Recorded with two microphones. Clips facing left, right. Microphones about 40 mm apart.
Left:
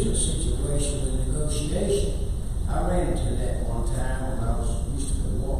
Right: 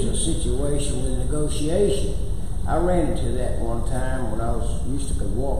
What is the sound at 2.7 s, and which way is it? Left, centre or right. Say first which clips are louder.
A man's voice: right 5 dB; centre.